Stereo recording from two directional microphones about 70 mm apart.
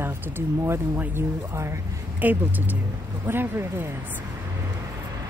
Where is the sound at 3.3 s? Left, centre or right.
Right.